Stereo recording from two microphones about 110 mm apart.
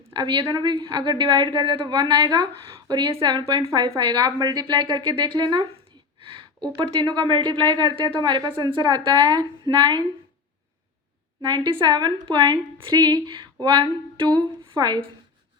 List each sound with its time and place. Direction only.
0.0 s a woman's voice: 45° right (ahead or behind)
11.4 s a woman's voice: 40° right (ahead or behind)